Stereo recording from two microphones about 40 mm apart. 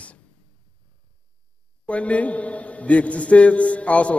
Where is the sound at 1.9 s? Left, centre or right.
Left.